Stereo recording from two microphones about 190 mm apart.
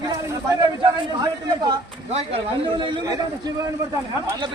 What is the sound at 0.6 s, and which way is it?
Speech, 25° right (ahead or behind).